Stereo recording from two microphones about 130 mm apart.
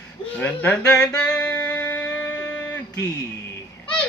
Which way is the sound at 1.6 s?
10° left (ahead or behind).